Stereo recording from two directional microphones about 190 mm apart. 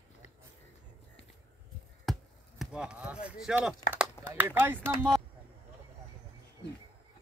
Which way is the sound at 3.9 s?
10° right (ahead or behind).